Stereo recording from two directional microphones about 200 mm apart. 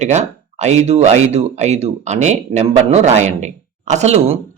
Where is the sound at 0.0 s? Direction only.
35° right (ahead or behind).